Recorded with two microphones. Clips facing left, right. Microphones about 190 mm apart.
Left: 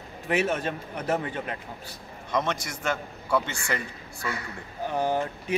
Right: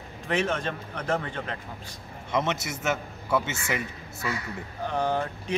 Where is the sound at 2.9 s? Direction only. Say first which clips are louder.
Even; 5° right (ahead or behind).